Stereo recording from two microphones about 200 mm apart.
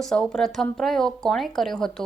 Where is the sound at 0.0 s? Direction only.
Centre (ahead or behind).